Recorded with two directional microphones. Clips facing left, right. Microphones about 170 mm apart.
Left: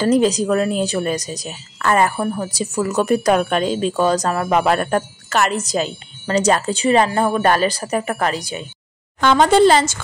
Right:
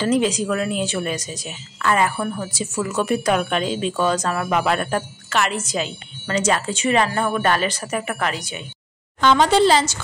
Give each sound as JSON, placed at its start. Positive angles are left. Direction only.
{"t": 0.0, "sound": "speech", "side_deg": 40}
{"t": 9.2, "sound": "speech", "side_deg": 50}